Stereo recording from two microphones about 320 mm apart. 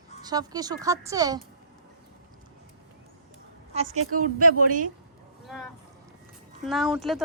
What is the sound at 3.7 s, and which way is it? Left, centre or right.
Speech, right.